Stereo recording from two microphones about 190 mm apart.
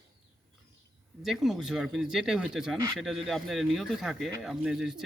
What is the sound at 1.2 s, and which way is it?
Speech, centre (ahead or behind).